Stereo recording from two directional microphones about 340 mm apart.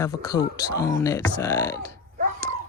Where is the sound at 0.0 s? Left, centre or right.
Centre.